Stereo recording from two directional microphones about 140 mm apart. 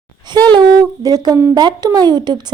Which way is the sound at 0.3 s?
30° right (ahead or behind).